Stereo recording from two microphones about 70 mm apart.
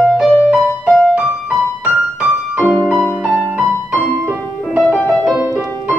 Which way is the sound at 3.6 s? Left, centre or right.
Centre.